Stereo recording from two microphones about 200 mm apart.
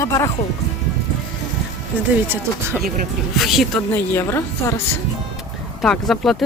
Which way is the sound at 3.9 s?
10° left (ahead or behind).